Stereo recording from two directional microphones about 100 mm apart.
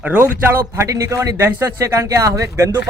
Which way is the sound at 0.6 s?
35° right (ahead or behind).